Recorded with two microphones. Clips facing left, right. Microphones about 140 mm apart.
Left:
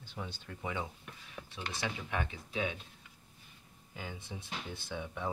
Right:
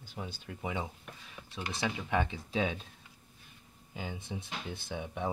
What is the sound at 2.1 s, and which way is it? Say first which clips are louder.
Speech: right 8 dB; 30° right (ahead or behind).